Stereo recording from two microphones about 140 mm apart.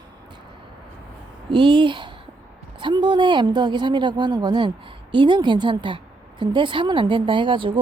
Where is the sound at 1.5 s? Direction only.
35° right (ahead or behind).